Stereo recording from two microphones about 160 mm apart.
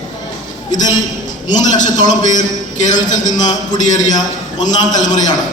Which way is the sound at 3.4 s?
25° left (ahead or behind).